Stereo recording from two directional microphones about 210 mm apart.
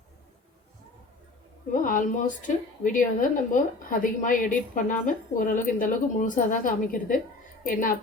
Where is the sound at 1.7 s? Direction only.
40° left (ahead or behind).